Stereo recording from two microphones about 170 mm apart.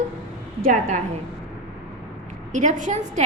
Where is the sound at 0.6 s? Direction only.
50° right (ahead or behind).